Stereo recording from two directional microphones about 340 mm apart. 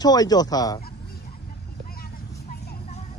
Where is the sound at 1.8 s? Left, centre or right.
Left.